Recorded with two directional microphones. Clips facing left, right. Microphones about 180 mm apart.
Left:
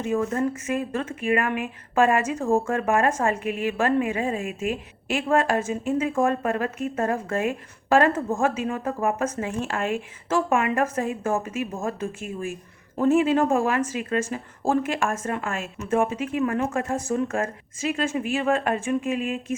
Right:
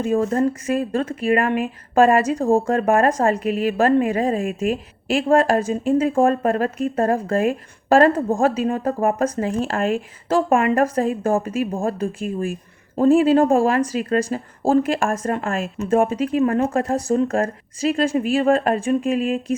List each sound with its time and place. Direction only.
0.0 s speech: 35° right (ahead or behind)